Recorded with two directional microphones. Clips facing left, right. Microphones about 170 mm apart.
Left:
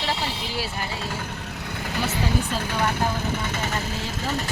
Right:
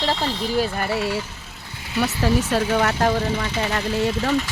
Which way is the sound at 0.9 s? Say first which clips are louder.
Right 7 dB; 65° right (ahead or behind).